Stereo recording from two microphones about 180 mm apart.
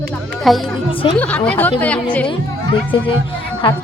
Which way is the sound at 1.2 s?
10° left (ahead or behind).